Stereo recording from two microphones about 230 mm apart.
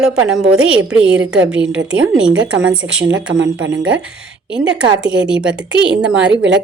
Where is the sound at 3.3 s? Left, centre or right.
Right.